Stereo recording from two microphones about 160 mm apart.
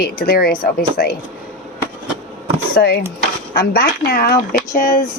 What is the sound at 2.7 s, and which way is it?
Speech, 75° left (ahead or behind).